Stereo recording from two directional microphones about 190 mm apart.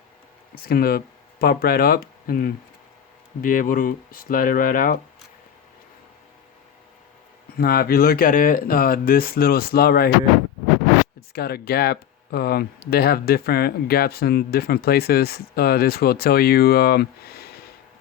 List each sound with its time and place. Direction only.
0.5 s speech: 55° left (ahead or behind)
7.6 s speech: 50° left (ahead or behind)
11.3 s speech: 55° left (ahead or behind)